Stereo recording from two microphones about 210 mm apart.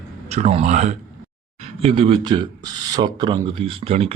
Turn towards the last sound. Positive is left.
turn(degrees=-25)  # may be behind; listen again after turning